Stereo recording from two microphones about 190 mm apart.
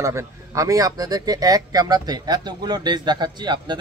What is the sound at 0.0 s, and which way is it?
A man's voice, 15° right (ahead or behind).